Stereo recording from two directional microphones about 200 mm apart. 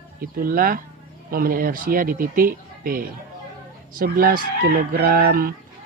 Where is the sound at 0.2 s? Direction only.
45° right (ahead or behind).